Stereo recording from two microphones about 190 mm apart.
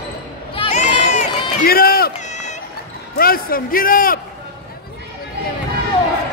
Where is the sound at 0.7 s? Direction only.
40° left (ahead or behind).